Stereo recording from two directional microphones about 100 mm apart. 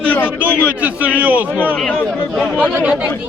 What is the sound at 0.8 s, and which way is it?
Speech, 15° right (ahead or behind).